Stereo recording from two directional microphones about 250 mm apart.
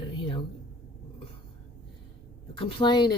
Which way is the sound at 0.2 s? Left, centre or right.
Centre.